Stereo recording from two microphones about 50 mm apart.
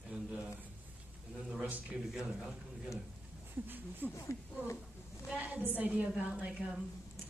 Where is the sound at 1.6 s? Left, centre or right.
Right.